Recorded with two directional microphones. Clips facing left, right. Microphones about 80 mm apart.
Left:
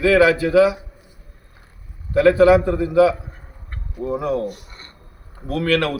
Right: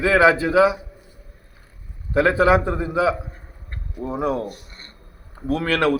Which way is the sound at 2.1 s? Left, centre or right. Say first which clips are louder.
Left 4 dB; right.